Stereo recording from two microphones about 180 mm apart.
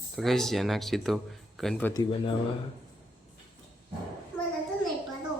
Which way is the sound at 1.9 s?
20° left (ahead or behind).